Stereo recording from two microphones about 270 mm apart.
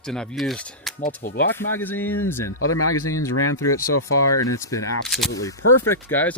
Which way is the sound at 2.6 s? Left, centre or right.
Left.